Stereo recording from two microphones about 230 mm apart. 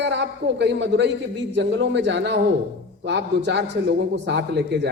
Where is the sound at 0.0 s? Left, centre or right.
Right.